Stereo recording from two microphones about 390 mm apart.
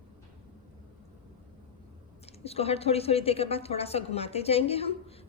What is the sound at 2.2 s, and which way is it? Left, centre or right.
A woman's voice, centre.